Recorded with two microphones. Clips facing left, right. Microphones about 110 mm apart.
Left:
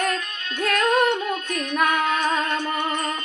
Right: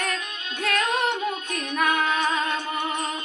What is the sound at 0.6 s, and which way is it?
Music, 50° left (ahead or behind).